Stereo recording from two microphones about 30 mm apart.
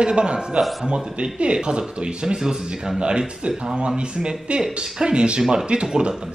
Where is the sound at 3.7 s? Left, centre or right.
Right.